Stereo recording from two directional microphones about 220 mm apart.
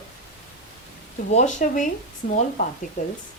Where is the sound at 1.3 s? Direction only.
30° left (ahead or behind).